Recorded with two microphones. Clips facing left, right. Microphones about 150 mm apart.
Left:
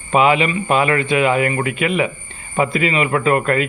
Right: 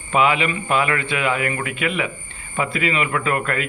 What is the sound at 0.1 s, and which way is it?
Speech, 20° left (ahead or behind).